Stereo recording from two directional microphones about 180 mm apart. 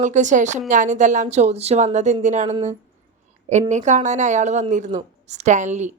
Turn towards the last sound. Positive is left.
turn(degrees=-40)  # may be behind; listen again after turning